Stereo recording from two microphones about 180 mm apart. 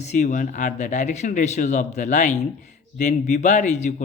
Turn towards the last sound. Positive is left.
turn(degrees=40)  # may be behind; listen again after turning